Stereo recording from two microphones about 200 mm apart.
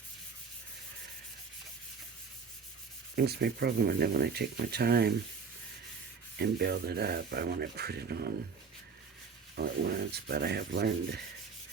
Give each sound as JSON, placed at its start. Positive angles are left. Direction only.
{"t": 3.2, "sound": "speech", "side_deg": -55}
{"t": 6.3, "sound": "speech", "side_deg": -55}
{"t": 9.6, "sound": "speech", "side_deg": -50}